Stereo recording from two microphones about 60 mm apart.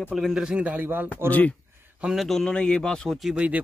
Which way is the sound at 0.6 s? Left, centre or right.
Right.